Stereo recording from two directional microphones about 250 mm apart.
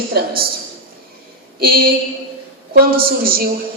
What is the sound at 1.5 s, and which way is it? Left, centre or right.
Speech, right.